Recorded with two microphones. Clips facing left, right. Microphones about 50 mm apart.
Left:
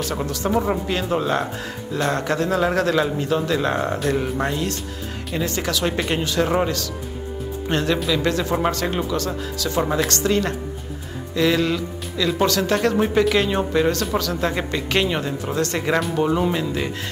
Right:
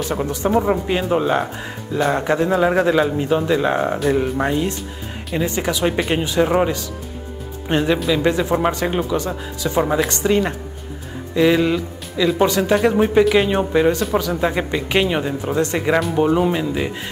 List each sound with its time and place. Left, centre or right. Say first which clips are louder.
0.0 s speech: right 3 dB; centre